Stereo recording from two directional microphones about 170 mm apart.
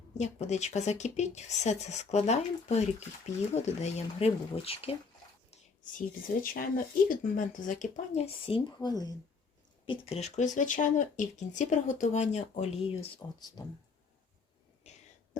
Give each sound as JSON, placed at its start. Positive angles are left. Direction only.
{"t": 0.1, "sound": "speech", "side_deg": 40}
{"t": 5.5, "sound": "speech", "side_deg": 55}
{"t": 13.6, "sound": "speech", "side_deg": 25}
{"t": 14.8, "sound": "whispering", "side_deg": 40}